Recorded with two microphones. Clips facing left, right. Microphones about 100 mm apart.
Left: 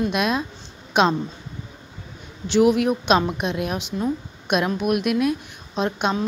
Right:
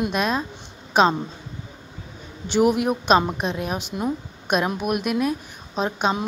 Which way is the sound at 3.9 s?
20° right (ahead or behind).